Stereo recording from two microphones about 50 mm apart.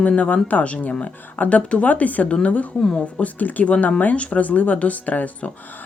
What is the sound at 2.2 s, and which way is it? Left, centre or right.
Speech, left.